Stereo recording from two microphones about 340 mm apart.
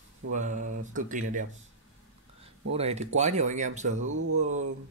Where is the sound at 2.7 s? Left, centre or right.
Centre.